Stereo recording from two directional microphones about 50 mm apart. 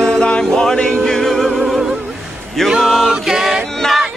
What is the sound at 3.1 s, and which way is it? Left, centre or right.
Chant, centre.